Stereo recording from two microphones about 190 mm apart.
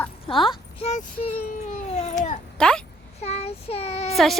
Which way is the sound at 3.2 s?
35° left (ahead or behind).